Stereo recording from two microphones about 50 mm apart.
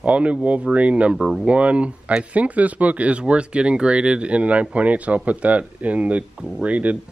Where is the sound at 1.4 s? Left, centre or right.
Right.